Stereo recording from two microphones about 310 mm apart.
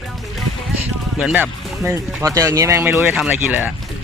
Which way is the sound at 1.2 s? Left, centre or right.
Centre.